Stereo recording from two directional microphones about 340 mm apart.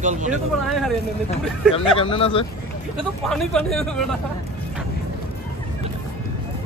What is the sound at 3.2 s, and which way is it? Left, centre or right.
Speech, centre.